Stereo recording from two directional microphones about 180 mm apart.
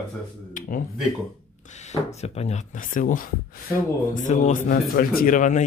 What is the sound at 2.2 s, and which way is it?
Speech, 35° left (ahead or behind).